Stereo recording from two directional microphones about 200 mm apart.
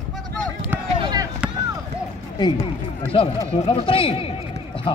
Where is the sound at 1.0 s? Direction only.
20° right (ahead or behind).